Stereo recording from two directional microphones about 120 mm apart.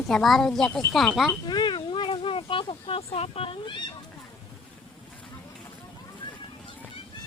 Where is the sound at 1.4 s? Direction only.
40° left (ahead or behind).